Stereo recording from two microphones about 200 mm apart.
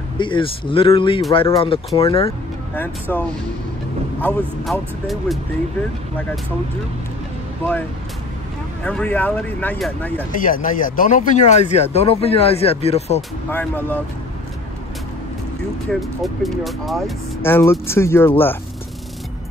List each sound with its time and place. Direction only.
0.2 s speech: 25° left (ahead or behind)
2.7 s speech: 10° left (ahead or behind)
8.8 s speech: 5° left (ahead or behind)
10.4 s speech: 45° left (ahead or behind)
13.5 s speech: 10° left (ahead or behind)
15.9 s speech: centre (ahead or behind)
17.4 s speech: 10° left (ahead or behind)